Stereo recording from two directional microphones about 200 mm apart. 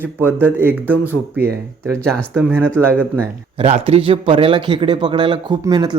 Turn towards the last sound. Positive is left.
turn(degrees=-20)  # may be behind; listen again after turning